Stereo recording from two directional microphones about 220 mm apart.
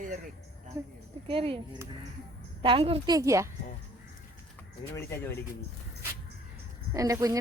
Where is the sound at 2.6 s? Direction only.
25° right (ahead or behind).